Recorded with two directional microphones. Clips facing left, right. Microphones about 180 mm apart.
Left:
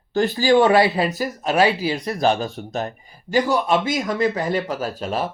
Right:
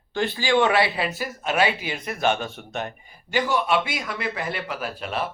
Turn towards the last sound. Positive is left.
turn(degrees=40)  # may be behind; listen again after turning